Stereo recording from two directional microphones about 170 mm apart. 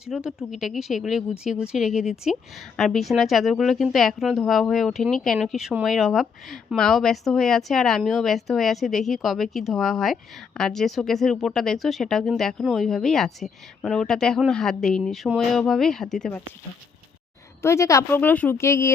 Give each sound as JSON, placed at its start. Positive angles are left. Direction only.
{"t": 0.0, "sound": "speech", "side_deg": 0}
{"t": 17.6, "sound": "a woman's voice", "side_deg": 15}